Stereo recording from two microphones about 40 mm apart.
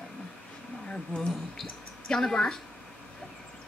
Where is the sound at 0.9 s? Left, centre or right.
Left.